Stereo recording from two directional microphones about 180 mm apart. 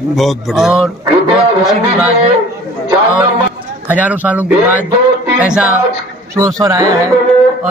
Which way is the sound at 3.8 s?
10° right (ahead or behind).